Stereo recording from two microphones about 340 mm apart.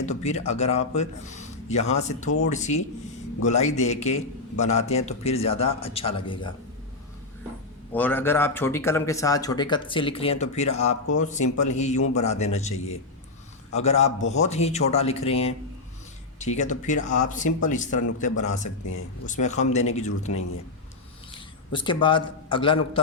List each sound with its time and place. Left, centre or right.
0.0 s a man's voice: centre
7.9 s a man's voice: centre
21.7 s speech: centre